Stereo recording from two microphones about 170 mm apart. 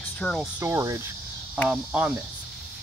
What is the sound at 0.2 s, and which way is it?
Speech, 5° left (ahead or behind).